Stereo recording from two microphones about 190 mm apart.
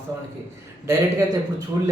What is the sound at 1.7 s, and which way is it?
Speech, 15° right (ahead or behind).